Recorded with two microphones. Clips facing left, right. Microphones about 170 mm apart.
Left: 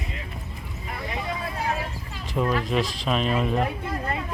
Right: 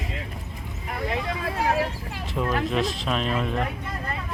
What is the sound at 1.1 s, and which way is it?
Vehicle, 90° right.